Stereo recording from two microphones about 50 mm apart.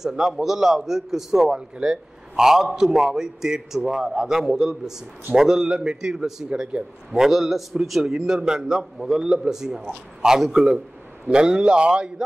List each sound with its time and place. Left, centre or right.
0.0 s a man's voice: centre
8.0 s a man's voice: centre